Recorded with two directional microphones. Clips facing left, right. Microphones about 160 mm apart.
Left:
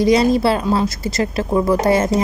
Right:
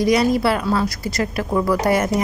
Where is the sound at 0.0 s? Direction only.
25° left (ahead or behind).